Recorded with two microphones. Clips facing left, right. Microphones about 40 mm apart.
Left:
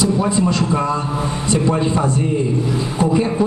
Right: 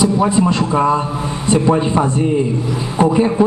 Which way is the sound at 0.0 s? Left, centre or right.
Centre.